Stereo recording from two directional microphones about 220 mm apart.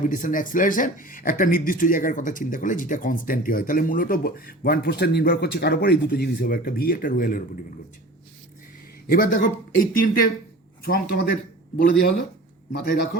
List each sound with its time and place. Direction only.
0.0 s speech: 35° left (ahead or behind)
9.0 s speech: 40° left (ahead or behind)
12.8 s speech: 40° left (ahead or behind)